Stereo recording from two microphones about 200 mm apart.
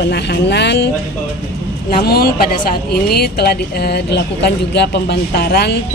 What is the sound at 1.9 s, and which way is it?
A woman's voice, 50° left (ahead or behind).